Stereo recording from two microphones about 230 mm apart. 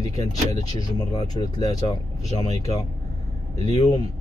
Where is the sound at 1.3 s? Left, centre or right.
Left.